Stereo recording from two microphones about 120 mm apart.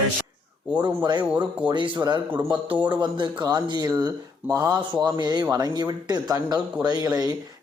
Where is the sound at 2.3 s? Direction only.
15° right (ahead or behind).